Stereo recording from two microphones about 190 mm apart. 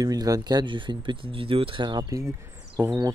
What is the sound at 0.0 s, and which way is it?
Speech, 20° right (ahead or behind).